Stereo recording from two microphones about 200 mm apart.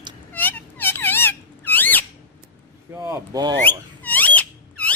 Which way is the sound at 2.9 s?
15° right (ahead or behind).